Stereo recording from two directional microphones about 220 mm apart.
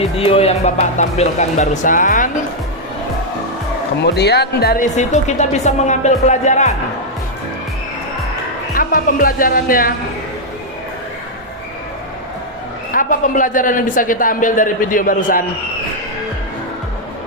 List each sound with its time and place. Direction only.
0.2 s speech: 25° left (ahead or behind)
4.0 s speech: 50° left (ahead or behind); by 6.7 s 30° left (ahead or behind)
8.7 s speech: 40° left (ahead or behind)
12.9 s speech: 35° left (ahead or behind)